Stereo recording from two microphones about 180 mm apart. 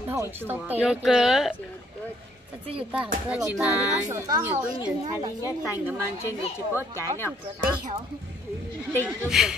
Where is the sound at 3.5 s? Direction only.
5° right (ahead or behind).